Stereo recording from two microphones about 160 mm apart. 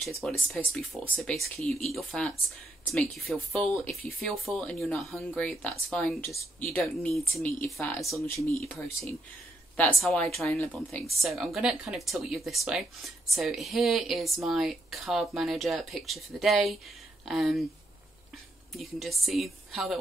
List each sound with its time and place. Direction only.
0.2 s speech: centre (ahead or behind)
18.8 s speech: centre (ahead or behind)